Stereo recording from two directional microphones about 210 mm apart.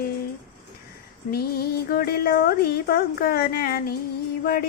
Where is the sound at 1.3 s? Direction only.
45° left (ahead or behind).